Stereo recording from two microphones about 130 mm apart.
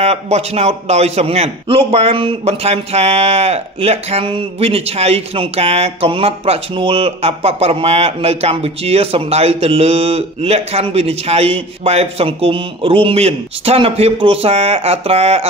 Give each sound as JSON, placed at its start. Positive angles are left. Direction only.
{"t": 0.0, "sound": "a man's voice", "side_deg": -55}